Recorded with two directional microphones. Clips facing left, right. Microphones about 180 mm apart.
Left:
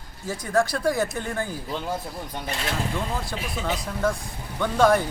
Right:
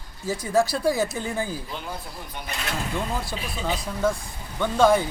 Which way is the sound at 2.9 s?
Centre (ahead or behind).